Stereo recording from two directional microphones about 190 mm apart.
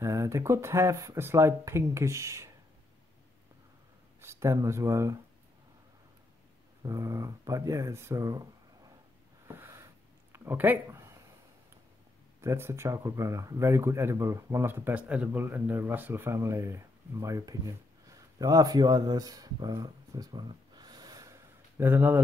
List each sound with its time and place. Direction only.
0.0 s speech: 15° right (ahead or behind)
4.2 s speech: 15° right (ahead or behind)
6.8 s speech: 15° right (ahead or behind)
9.5 s a sound: 10° right (ahead or behind)
12.4 s speech: 15° right (ahead or behind)